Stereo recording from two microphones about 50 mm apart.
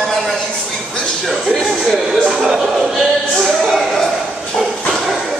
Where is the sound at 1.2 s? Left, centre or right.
Centre.